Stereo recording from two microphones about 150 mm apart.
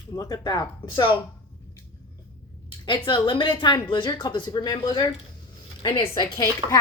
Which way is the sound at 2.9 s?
30° left (ahead or behind).